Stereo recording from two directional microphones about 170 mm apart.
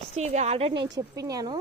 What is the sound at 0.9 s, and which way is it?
Speech, 20° right (ahead or behind).